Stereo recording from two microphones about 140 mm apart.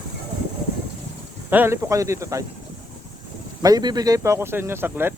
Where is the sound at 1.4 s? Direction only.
15° right (ahead or behind).